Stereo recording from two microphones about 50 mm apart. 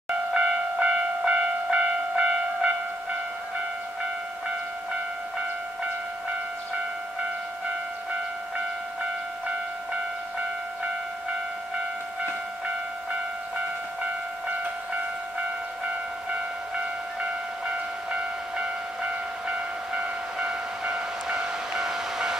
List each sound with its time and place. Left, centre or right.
0.3 s train: right
20.3 s train: centre